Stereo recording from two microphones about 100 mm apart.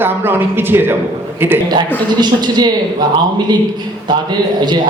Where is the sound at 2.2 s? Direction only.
45° right (ahead or behind).